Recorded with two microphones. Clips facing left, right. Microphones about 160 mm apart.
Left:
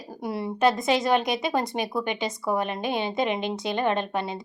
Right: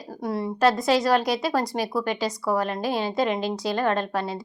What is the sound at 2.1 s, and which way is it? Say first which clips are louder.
Speech: right 2 dB; 25° left (ahead or behind).